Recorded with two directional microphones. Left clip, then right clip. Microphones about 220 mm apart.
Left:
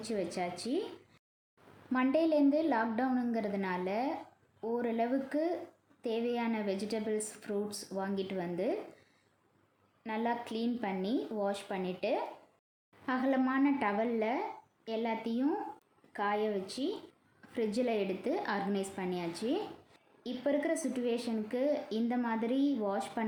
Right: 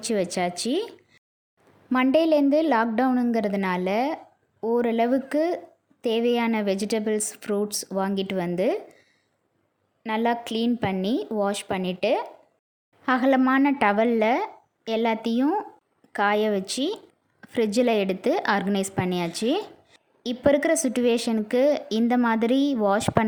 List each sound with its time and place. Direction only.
0.0 s a woman's voice: 45° right (ahead or behind)
1.9 s a woman's voice: 45° right (ahead or behind)
10.0 s a woman's voice: 45° right (ahead or behind)